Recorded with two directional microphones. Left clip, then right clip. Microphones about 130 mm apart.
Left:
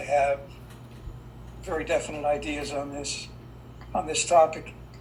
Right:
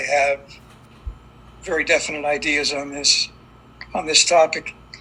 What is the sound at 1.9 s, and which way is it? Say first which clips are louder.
Speech: right 5 dB; 25° right (ahead or behind).